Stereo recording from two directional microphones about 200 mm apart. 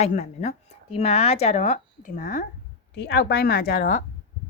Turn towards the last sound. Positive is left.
turn(degrees=45)  # may be behind; listen again after turning